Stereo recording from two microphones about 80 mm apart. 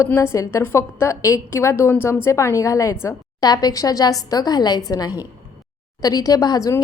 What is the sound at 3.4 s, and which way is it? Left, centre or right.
A woman's voice, left.